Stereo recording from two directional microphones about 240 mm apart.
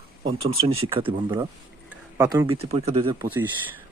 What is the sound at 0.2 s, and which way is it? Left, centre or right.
Speech, right.